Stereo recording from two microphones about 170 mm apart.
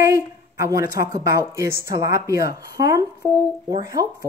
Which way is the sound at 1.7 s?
70° left (ahead or behind).